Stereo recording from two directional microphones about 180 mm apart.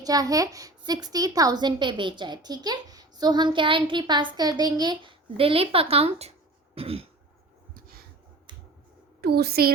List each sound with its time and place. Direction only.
0.0 s a child's voice: 20° right (ahead or behind)
6.7 s throat clearing: 30° right (ahead or behind)
7.7 s a sound: 55° right (ahead or behind)
9.2 s a woman's voice: 60° right (ahead or behind)